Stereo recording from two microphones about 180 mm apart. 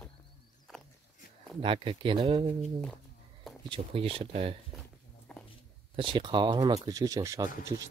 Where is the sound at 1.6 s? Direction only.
30° right (ahead or behind).